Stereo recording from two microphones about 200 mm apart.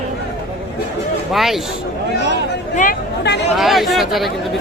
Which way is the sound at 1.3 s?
Centre (ahead or behind).